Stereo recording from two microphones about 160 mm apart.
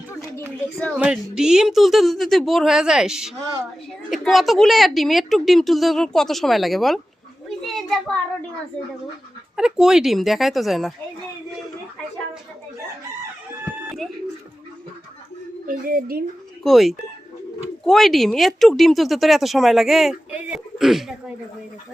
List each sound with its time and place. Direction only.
0.9 s speech: 5° right (ahead or behind)
7.6 s a sound: centre (ahead or behind)
9.6 s speech: 5° right (ahead or behind)
15.6 s a woman's voice: 60° right (ahead or behind)
16.6 s speech: centre (ahead or behind)